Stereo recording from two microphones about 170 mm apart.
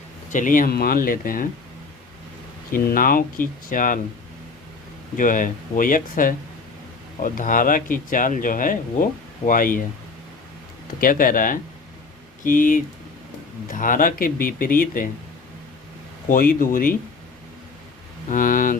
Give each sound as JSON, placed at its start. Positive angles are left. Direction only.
{"t": 0.3, "sound": "speech", "side_deg": 50}
{"t": 2.7, "sound": "speech", "side_deg": 55}
{"t": 5.1, "sound": "speech", "side_deg": 50}
{"t": 11.0, "sound": "speech", "side_deg": 55}
{"t": 16.3, "sound": "speech", "side_deg": 55}
{"t": 18.3, "sound": "speech", "side_deg": 55}